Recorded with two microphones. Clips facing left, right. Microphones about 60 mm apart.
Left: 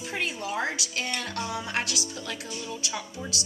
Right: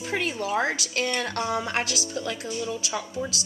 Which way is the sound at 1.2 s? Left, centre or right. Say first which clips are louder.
Right 5 dB; right.